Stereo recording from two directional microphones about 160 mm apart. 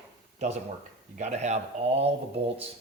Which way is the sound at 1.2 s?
45° right (ahead or behind).